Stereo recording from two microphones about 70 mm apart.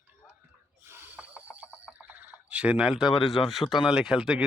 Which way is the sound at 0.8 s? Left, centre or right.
Right.